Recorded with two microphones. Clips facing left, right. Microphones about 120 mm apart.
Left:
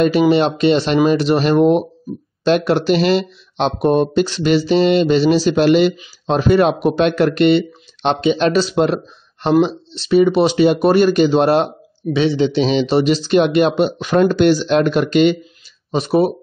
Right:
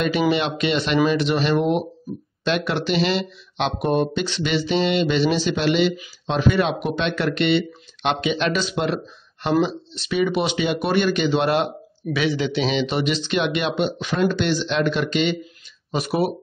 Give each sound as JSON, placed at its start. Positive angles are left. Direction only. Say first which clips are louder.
{"t": 0.3, "sound": "speech", "louder": "left 8 dB", "side_deg": 35}
{"t": 15.9, "sound": "speech", "louder": "left 7 dB", "side_deg": 30}